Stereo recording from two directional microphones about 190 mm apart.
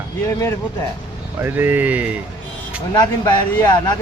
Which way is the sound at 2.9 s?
20° left (ahead or behind).